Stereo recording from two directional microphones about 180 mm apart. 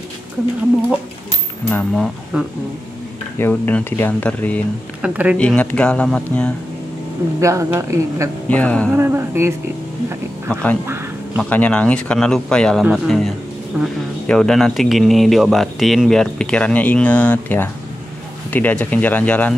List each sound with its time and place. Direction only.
1.7 s speech: 10° left (ahead or behind)
2.3 s speech: 5° right (ahead or behind)
3.3 s speech: 10° left (ahead or behind)
5.0 s speech: 5° right (ahead or behind)
5.4 s speech: 5° left (ahead or behind)
7.3 s speech: 15° right (ahead or behind)
8.5 s speech: 5° left (ahead or behind)
8.9 s speech: 15° right (ahead or behind)
10.5 s speech: 5° left (ahead or behind)
10.9 s a sound: 15° right (ahead or behind)
11.4 s speech: 10° left (ahead or behind)